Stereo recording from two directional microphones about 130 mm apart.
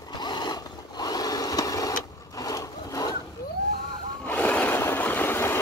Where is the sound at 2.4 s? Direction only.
25° left (ahead or behind).